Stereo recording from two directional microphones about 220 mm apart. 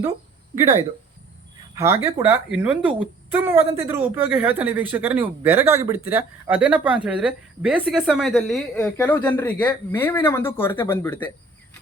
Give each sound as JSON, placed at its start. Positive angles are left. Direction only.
{"t": 0.5, "sound": "speech", "side_deg": -15}